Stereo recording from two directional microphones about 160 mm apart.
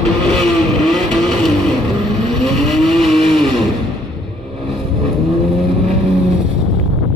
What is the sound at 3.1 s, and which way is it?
Vehicle, 35° right (ahead or behind).